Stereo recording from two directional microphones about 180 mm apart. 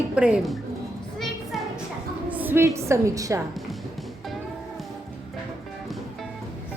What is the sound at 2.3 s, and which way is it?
A woman's voice, 10° right (ahead or behind).